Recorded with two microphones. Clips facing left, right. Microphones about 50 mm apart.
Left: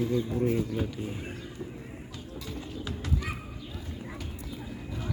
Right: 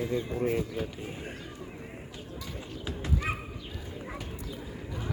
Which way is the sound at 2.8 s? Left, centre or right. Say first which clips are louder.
Right 2 dB; right.